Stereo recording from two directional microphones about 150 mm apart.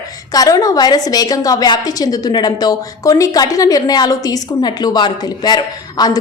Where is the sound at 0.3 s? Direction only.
25° left (ahead or behind).